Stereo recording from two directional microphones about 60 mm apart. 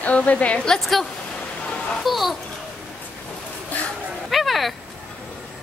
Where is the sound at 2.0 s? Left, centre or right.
Centre.